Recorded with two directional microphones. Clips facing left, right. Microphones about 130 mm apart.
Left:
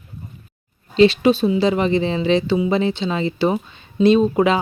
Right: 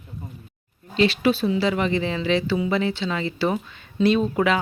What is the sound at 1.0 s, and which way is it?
Speech, 25° left (ahead or behind).